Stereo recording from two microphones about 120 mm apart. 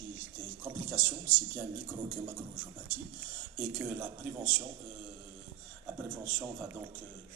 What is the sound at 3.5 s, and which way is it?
Speech, 15° right (ahead or behind).